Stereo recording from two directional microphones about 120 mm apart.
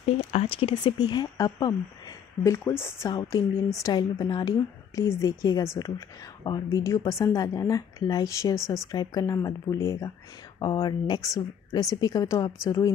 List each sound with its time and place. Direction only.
0.0 s a woman's voice: 60° left (ahead or behind); by 12.9 s 25° left (ahead or behind)